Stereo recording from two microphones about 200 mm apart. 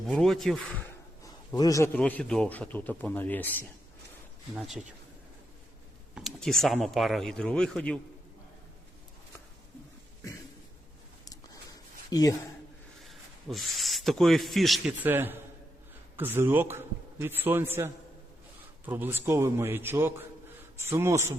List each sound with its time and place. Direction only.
0.0 s speech: centre (ahead or behind)
1.2 s a man's voice: 15° left (ahead or behind)
4.5 s speech: centre (ahead or behind)
6.1 s speech: centre (ahead or behind)
11.3 s a sound: 20° left (ahead or behind)
13.1 s a man's voice: centre (ahead or behind)